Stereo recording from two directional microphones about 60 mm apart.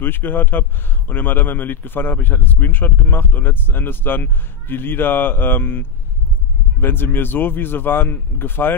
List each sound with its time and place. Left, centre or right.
0.0 s a man's voice: left